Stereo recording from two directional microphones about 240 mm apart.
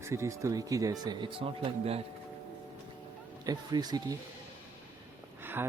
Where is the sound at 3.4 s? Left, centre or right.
Centre.